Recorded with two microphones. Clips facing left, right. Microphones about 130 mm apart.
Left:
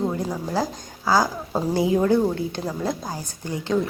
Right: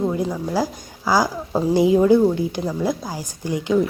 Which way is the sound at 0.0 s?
Centre (ahead or behind).